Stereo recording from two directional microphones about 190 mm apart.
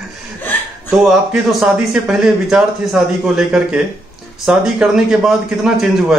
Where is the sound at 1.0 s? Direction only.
Centre (ahead or behind).